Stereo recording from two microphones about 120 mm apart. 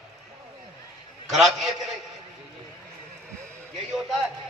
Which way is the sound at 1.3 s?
Centre (ahead or behind).